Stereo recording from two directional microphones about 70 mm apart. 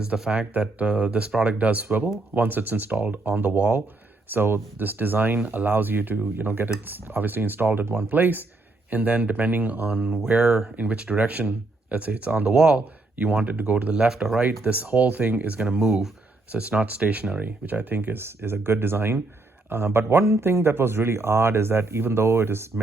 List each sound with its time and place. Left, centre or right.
0.0 s speech: centre
14.4 s speech: right
16.5 s speech: centre; by 22.8 s right